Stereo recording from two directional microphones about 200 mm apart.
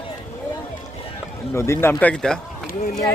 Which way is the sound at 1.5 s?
15° left (ahead or behind).